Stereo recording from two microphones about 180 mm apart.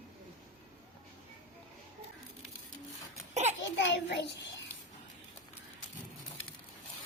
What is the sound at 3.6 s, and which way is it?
Speech, 80° left.